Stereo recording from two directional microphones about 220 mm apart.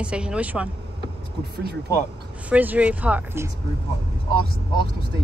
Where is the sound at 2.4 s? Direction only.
5° right (ahead or behind).